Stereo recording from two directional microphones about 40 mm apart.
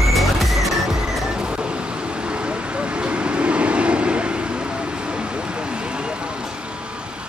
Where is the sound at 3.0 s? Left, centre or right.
Right.